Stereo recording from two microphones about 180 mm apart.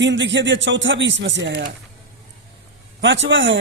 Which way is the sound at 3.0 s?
80° right.